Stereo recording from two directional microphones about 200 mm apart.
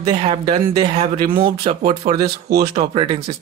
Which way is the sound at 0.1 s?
30° right (ahead or behind).